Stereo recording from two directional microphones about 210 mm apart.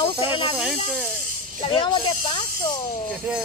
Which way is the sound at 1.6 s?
25° left (ahead or behind).